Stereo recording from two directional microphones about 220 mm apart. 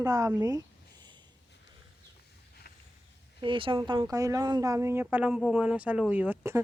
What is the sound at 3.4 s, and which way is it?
Speech, 25° right (ahead or behind).